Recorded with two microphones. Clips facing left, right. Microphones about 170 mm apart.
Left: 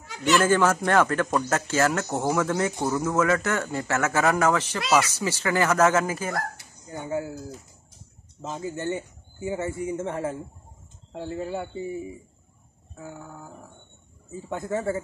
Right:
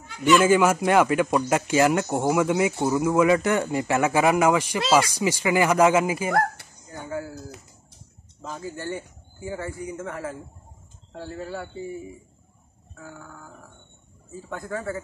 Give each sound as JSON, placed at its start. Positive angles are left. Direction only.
{"t": 0.2, "sound": "speech", "side_deg": -10}
{"t": 4.7, "sound": "speech", "side_deg": -25}
{"t": 5.1, "sound": "speech", "side_deg": -15}
{"t": 6.3, "sound": "speech", "side_deg": -60}
{"t": 6.9, "sound": "speech", "side_deg": 20}
{"t": 8.4, "sound": "speech", "side_deg": 20}
{"t": 12.9, "sound": "speech", "side_deg": 20}